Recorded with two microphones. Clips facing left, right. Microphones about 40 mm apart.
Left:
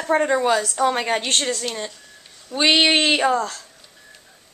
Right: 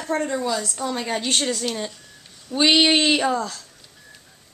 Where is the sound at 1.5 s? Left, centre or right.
Centre.